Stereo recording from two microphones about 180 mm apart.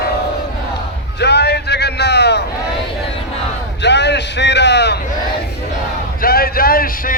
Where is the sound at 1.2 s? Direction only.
65° left (ahead or behind).